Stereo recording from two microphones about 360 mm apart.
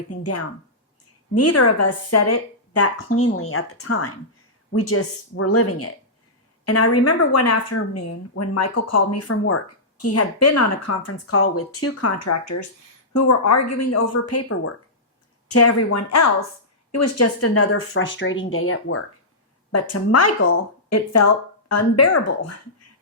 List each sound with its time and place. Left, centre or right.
0.1 s speech: left